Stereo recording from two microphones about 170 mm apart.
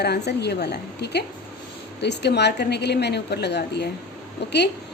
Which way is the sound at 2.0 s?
85° left.